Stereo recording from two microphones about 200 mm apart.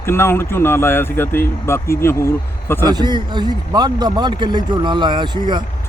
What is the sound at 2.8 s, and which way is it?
Speech, 20° right (ahead or behind).